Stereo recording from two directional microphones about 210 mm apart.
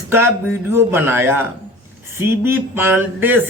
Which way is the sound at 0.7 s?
10° right (ahead or behind).